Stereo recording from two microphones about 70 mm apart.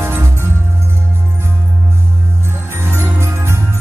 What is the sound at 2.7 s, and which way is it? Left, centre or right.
Music, right.